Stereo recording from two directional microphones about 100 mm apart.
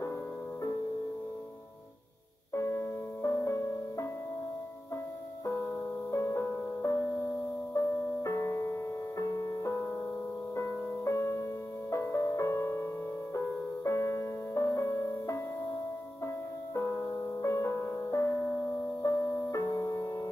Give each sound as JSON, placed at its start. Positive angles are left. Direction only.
{"t": 2.5, "sound": "music", "side_deg": 25}
{"t": 5.4, "sound": "music", "side_deg": 30}
{"t": 16.7, "sound": "music", "side_deg": 30}